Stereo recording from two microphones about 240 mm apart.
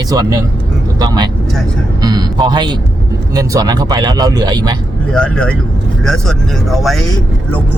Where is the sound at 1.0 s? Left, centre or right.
Centre.